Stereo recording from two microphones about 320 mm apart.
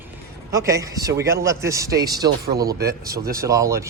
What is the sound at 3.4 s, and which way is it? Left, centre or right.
Speech, centre.